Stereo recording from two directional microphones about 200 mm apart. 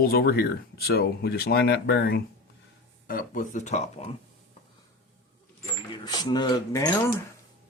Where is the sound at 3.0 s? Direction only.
45° left (ahead or behind).